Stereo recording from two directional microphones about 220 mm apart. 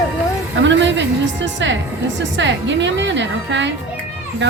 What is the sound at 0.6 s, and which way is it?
A woman's voice, 55° right (ahead or behind).